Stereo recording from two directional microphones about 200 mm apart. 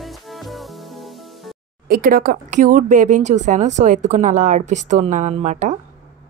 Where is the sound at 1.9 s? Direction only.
45° right (ahead or behind).